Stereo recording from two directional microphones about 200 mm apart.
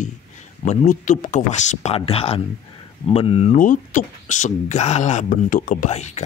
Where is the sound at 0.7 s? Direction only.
35° left (ahead or behind).